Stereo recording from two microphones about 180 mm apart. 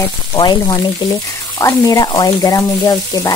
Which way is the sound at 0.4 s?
25° left (ahead or behind).